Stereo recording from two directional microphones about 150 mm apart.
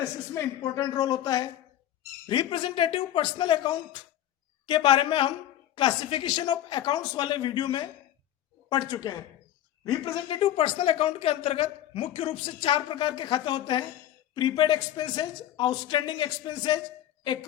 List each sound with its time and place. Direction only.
0.0 s speech: 20° left (ahead or behind)